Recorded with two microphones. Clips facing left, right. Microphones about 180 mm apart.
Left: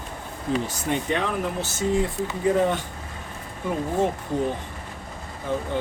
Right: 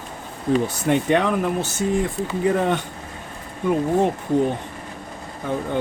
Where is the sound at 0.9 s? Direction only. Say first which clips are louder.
Right 7 dB; 60° right (ahead or behind).